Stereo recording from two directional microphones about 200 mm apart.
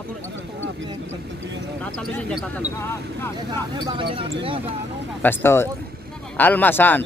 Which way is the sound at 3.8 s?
25° right (ahead or behind).